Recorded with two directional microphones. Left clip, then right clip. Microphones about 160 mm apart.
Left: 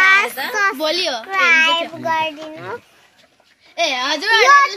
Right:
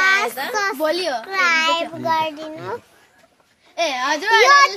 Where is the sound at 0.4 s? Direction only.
70° right (ahead or behind).